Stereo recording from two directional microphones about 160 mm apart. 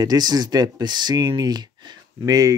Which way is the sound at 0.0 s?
25° right (ahead or behind).